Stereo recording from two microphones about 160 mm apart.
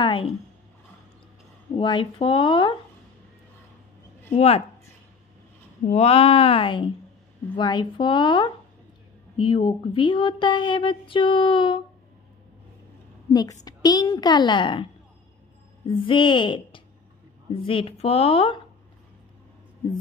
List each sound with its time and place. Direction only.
0.0 s speech: 30° left (ahead or behind)
1.8 s speech: 30° left (ahead or behind)
4.3 s speech: 40° left (ahead or behind)
5.9 s a woman's voice: 40° left (ahead or behind)
13.3 s a woman's voice: 25° left (ahead or behind)
16.1 s speech: 30° left (ahead or behind)